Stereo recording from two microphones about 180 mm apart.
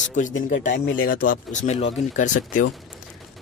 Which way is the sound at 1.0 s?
50° left (ahead or behind).